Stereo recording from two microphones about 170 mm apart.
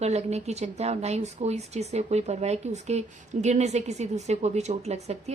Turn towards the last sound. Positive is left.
turn(degrees=-40)  # may be behind; listen again after turning